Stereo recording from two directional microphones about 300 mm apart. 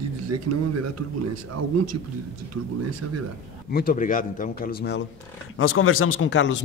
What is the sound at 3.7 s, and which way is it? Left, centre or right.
A man's voice, left.